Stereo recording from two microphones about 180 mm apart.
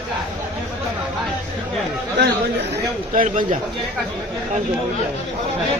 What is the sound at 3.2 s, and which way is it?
Speech, 45° right (ahead or behind).